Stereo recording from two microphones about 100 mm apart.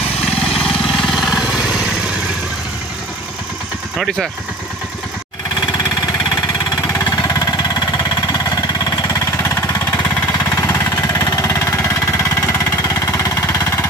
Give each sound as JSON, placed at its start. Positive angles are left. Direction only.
{"t": 0.5, "sound": "vehicle", "side_deg": 5}
{"t": 7.1, "sound": "a sound", "side_deg": 40}
{"t": 12.4, "sound": "jackhammer", "side_deg": 35}